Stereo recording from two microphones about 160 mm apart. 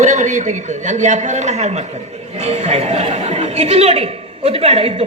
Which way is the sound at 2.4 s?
45° right (ahead or behind).